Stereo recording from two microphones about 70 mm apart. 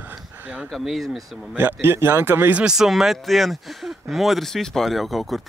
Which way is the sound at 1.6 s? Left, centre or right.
Right.